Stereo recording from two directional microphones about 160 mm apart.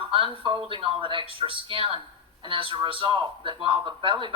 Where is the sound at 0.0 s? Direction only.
35° right (ahead or behind).